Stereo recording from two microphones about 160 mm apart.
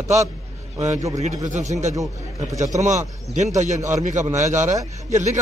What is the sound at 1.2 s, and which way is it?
Speech, 45° right (ahead or behind).